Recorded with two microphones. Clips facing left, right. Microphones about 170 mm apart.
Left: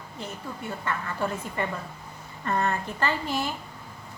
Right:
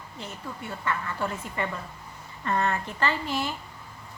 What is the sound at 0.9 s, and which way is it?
Speech, 45° left (ahead or behind).